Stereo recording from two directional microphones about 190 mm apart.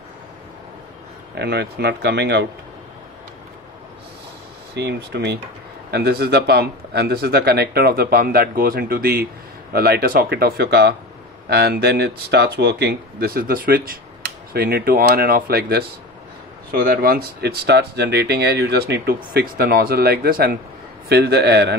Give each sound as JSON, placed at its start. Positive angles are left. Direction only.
{"t": 1.3, "sound": "speech", "side_deg": -60}
{"t": 4.7, "sound": "speech", "side_deg": -65}